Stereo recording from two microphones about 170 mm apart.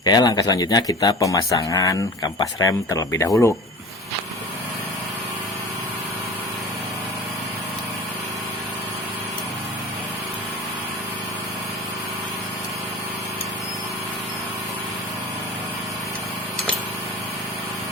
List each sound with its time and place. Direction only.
0.0 s speech: 25° left (ahead or behind)